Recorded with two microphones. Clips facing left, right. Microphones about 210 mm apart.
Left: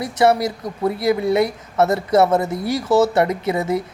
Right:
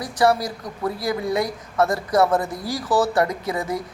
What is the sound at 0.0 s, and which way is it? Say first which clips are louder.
Speech: left 3 dB; 25° left (ahead or behind).